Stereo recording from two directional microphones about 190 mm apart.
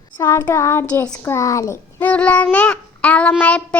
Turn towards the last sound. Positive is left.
turn(degrees=5)  # may be behind; listen again after turning